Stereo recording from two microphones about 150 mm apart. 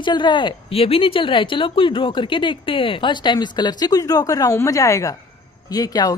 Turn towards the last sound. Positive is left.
turn(degrees=25)  # may be behind; listen again after turning